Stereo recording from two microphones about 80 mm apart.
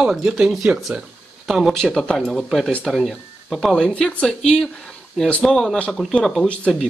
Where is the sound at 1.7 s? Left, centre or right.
Centre.